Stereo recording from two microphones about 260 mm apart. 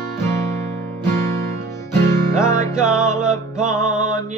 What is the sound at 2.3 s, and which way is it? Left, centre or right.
Music, centre.